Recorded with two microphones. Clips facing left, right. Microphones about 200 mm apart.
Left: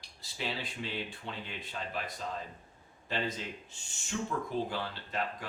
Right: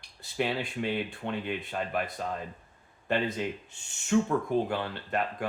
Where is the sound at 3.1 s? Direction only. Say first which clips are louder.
Right 7 dB; 60° right (ahead or behind).